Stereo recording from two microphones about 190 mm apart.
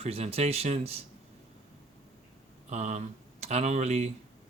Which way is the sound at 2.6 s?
35° right (ahead or behind).